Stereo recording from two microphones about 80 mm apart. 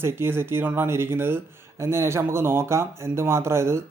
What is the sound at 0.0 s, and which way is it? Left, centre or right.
Speech, right.